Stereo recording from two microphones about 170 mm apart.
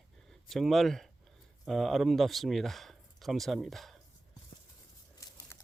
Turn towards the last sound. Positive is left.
turn(degrees=20)  # may be behind; listen again after turning